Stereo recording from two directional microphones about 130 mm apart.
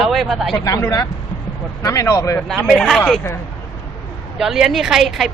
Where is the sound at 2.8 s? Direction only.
5° left (ahead or behind).